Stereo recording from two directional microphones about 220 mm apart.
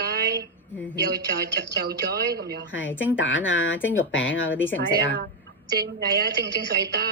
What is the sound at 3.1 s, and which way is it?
Speech, 60° left (ahead or behind).